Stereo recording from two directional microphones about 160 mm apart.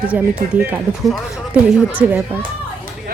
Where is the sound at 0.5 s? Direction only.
10° right (ahead or behind).